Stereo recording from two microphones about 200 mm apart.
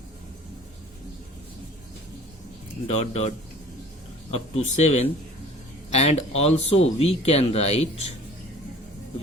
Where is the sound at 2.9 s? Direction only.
35° left (ahead or behind).